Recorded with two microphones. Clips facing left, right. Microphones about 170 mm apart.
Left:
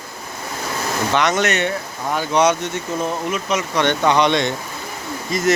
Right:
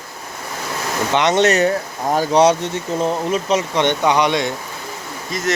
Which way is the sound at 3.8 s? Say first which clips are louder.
Left 3 dB; 15° right (ahead or behind).